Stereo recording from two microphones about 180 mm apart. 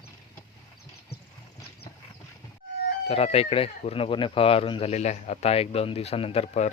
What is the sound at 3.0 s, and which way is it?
Speech, 35° left (ahead or behind).